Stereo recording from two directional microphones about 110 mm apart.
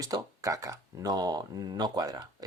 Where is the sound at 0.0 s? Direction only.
35° right (ahead or behind).